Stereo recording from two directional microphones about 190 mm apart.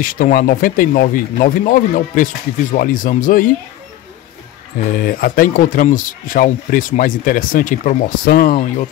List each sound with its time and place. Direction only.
0.0 s speech: 45° left (ahead or behind)
4.7 s speech: 50° left (ahead or behind)